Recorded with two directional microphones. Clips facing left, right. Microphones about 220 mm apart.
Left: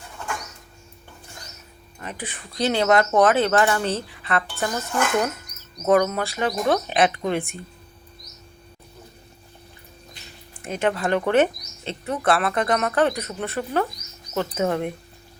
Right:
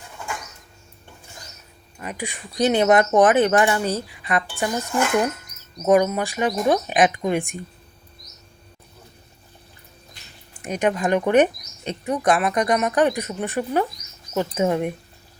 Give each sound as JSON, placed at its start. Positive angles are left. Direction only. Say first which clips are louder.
{"t": 2.0, "sound": "speech", "louder": "right 3 dB", "side_deg": -10}
{"t": 10.6, "sound": "speech", "louder": "right 2 dB", "side_deg": -15}